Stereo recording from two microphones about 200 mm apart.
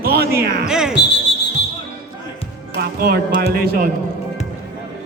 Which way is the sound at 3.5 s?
50° right (ahead or behind).